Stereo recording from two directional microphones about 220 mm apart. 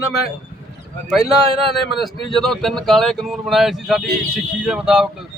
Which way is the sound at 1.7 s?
Centre (ahead or behind).